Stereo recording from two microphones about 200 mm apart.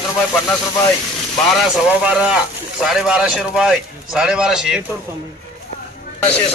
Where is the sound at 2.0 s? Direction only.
5° right (ahead or behind).